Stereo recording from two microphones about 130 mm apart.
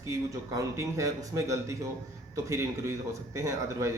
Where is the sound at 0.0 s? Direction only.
25° right (ahead or behind).